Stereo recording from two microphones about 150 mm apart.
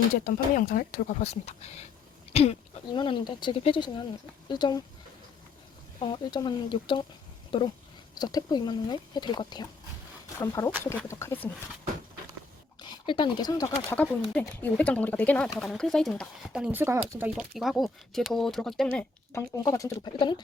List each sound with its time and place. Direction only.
0.3 s speech: 65° left (ahead or behind)
1.2 s speech: 45° left (ahead or behind); by 4.8 s 30° left (ahead or behind)
6.0 s speech: 30° left (ahead or behind); by 11.3 s 15° left (ahead or behind)
12.8 s speech: 30° left (ahead or behind)
13.9 s speech: 10° left (ahead or behind)
16.5 s speech: 5° right (ahead or behind)
18.9 s speech: 15° left (ahead or behind)
20.0 s speech: 30° left (ahead or behind)